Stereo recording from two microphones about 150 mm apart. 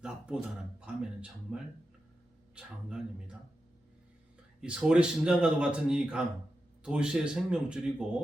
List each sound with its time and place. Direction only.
0.0 s a man's voice: 5° right (ahead or behind)
4.6 s a man's voice: 5° right (ahead or behind)